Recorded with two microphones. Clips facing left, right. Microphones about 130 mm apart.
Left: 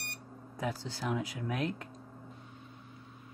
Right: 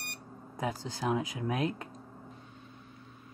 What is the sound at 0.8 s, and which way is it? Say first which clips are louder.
Speech: right 4 dB; 45° right (ahead or behind).